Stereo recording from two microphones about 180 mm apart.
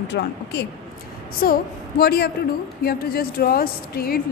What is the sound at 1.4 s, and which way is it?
A woman's voice, 55° left (ahead or behind).